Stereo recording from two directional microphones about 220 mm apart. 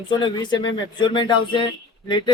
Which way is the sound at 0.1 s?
20° left (ahead or behind).